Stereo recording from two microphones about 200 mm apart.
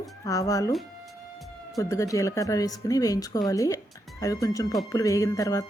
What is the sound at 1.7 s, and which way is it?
Speech, 15° left (ahead or behind).